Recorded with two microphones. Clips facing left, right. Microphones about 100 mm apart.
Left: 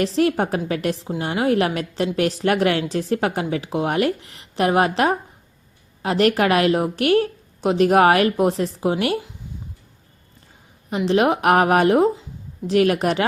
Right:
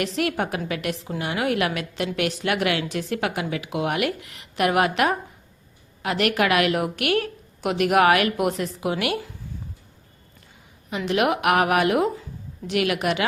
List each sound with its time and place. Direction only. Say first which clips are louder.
0.0 s a woman's voice: left 5 dB; 30° left (ahead or behind)
10.8 s a woman's voice: left 4 dB; 35° left (ahead or behind)